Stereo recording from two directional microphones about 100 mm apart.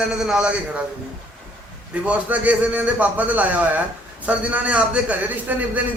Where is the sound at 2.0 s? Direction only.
15° right (ahead or behind).